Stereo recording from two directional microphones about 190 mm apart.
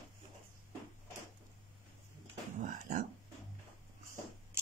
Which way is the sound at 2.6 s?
45° right (ahead or behind).